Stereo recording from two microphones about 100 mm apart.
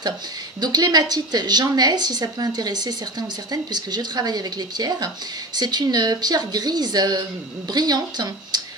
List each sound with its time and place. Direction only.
0.6 s a woman's voice: 45° right (ahead or behind)